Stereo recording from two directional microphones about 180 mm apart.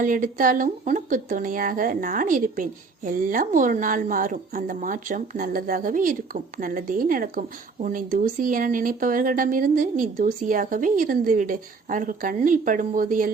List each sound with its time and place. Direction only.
0.0 s speech: 50° right (ahead or behind)